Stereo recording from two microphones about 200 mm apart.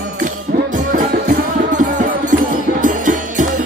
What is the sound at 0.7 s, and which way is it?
Music, 40° right (ahead or behind).